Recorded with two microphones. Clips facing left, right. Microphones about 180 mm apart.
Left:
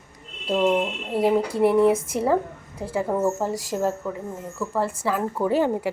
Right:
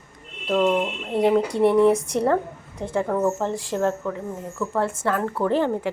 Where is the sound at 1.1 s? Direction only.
5° left (ahead or behind).